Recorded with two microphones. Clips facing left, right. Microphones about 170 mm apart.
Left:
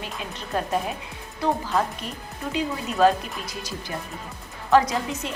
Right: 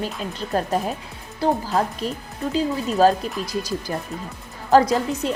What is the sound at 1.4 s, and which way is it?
Speech, 35° right (ahead or behind).